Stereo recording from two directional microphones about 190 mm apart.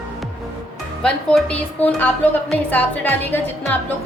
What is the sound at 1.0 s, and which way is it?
A woman's voice, 5° left (ahead or behind).